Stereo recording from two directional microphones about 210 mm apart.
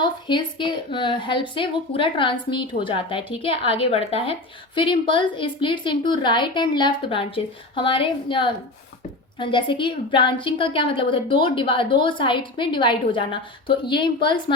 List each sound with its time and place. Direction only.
0.0 s a woman's voice: 20° left (ahead or behind)